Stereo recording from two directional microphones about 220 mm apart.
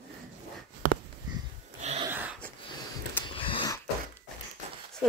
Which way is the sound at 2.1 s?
10° right (ahead or behind).